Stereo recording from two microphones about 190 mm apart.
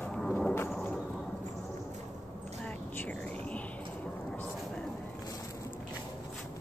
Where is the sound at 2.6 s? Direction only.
5° left (ahead or behind).